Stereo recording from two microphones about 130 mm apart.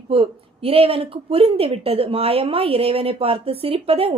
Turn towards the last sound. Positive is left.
turn(degrees=-50)  # may be behind; listen again after turning